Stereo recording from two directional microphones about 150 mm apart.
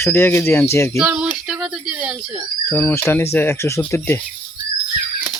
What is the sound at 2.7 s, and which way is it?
A child's voice, 15° left (ahead or behind).